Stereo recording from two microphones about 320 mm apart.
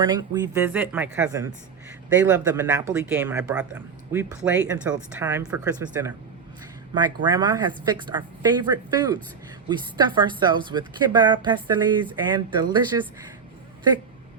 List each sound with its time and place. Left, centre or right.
0.0 s a woman's voice: centre